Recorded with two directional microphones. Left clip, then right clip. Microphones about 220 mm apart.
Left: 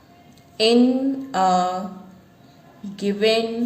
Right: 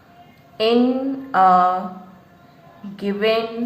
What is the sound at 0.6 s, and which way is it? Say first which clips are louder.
A woman's voice: even; 40° left (ahead or behind).